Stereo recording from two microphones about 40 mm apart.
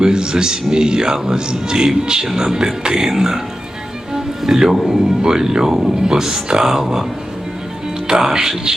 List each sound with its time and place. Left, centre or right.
0.0 s a man's voice: centre
4.1 s music: centre
4.9 s speech: centre
8.0 s speech: centre